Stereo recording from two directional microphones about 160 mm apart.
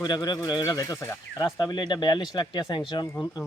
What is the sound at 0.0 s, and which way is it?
A man's voice, 25° left (ahead or behind).